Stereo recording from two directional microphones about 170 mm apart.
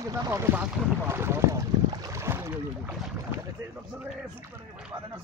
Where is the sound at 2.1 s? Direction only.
15° right (ahead or behind).